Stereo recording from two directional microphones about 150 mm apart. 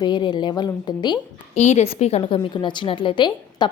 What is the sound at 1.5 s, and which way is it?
A woman's voice, 50° left (ahead or behind).